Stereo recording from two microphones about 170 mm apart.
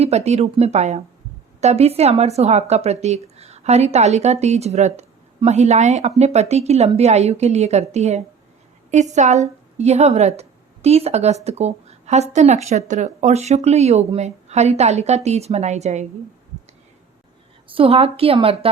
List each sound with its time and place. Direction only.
0.0 s speech: 40° right (ahead or behind)
17.7 s speech: 35° right (ahead or behind)